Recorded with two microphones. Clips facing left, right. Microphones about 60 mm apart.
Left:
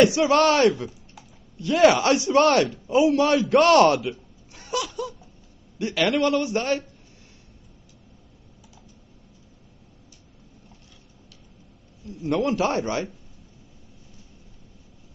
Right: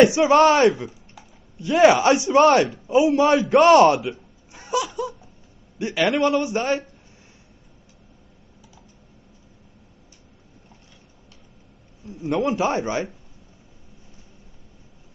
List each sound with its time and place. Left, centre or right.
0.0 s a man's voice: right
12.0 s a man's voice: right